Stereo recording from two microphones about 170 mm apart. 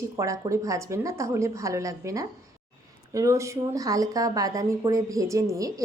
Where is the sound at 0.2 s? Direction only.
20° right (ahead or behind).